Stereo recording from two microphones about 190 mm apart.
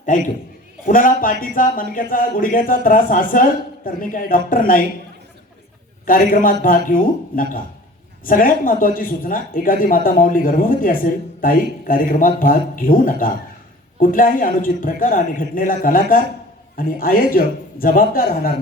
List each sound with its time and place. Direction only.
0.9 s speech: 45° left (ahead or behind)
6.1 s speech: 45° left (ahead or behind)